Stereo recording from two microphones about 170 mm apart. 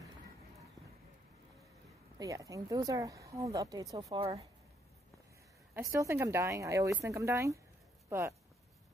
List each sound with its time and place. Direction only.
2.1 s a woman's voice: 20° right (ahead or behind)
5.8 s speech: 20° right (ahead or behind)